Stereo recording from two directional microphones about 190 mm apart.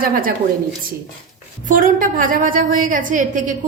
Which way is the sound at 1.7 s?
45° right (ahead or behind).